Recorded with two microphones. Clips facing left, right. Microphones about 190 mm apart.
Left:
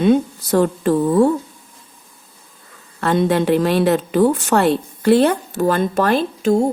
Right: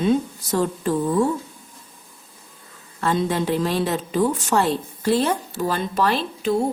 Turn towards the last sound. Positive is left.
turn(degrees=45)  # may be behind; listen again after turning